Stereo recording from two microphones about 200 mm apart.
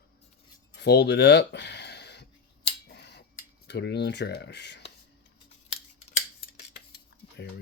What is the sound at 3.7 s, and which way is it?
Speech, 55° left (ahead or behind).